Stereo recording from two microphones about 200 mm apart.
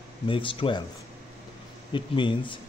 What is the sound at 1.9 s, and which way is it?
Speech, 25° left (ahead or behind).